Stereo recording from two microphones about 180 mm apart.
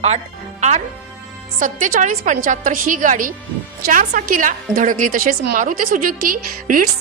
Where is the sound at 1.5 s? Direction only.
45° right (ahead or behind).